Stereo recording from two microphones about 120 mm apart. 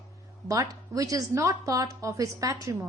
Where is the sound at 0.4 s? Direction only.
30° right (ahead or behind).